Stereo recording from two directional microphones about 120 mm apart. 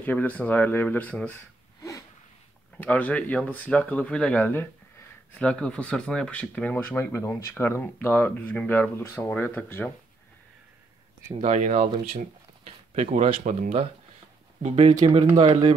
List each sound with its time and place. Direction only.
0.0 s speech: 15° left (ahead or behind)
1.8 s a sound: 25° left (ahead or behind)
2.8 s speech: 15° left (ahead or behind)
11.4 s speech: 85° right
14.9 s speech: 40° right (ahead or behind)